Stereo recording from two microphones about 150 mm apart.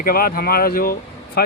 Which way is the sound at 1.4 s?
90° left.